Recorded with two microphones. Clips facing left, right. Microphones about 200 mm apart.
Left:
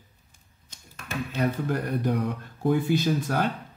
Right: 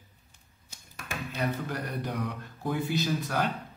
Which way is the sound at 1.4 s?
50° left (ahead or behind).